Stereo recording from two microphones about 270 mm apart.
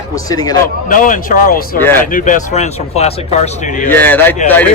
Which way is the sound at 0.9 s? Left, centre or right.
Left.